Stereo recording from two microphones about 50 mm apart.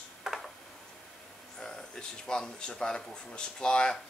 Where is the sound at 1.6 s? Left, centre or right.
Centre.